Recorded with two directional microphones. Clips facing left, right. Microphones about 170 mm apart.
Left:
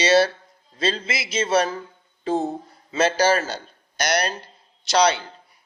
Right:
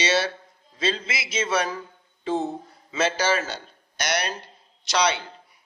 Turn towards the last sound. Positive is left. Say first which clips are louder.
# left 4 dB
turn(degrees=35)  # may be behind; listen again after turning